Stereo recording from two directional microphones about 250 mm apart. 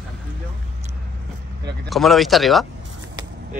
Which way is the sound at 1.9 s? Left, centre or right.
Centre.